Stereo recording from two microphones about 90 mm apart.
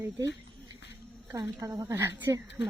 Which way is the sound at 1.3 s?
35° right (ahead or behind).